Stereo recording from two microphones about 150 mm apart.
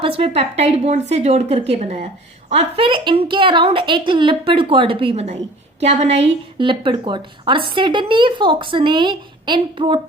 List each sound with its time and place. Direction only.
0.0 s a woman's voice: 40° right (ahead or behind)